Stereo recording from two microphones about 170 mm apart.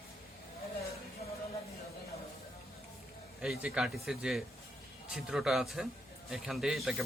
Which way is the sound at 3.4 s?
5° right (ahead or behind).